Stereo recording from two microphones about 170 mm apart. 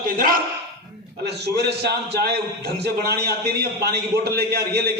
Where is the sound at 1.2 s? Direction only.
75° right (ahead or behind).